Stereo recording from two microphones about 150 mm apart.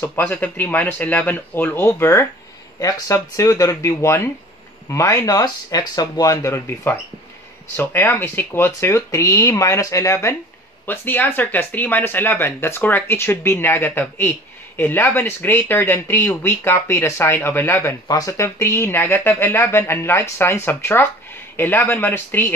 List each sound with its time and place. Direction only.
0.0 s speech: 10° left (ahead or behind)